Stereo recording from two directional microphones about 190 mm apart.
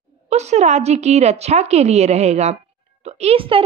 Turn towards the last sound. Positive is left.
turn(degrees=-30)  # may be behind; listen again after turning